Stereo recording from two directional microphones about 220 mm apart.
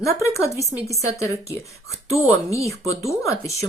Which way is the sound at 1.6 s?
15° left (ahead or behind).